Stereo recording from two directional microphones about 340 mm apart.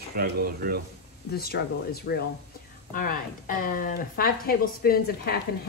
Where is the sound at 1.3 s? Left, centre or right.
Left.